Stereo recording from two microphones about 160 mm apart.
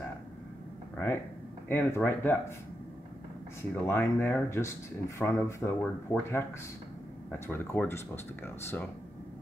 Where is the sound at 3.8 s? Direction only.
15° left (ahead or behind).